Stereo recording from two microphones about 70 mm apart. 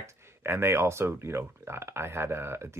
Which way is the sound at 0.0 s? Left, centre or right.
Right.